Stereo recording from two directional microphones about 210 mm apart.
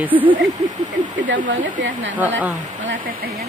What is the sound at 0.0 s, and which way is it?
Speech, 10° right (ahead or behind).